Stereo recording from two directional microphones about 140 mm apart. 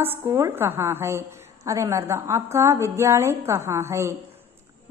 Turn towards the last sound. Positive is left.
turn(degrees=-20)  # may be behind; listen again after turning